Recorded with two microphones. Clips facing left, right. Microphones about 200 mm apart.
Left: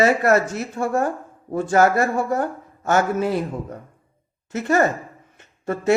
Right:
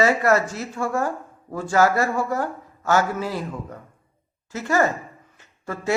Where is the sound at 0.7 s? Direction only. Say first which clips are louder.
Left 3 dB; 25° left (ahead or behind).